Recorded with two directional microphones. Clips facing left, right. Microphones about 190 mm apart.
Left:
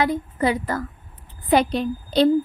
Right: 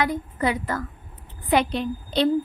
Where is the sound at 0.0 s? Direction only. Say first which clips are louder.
Left 3 dB; 30° left (ahead or behind).